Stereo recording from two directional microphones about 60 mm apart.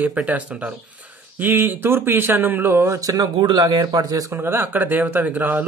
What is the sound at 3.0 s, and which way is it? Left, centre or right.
A man's voice, right.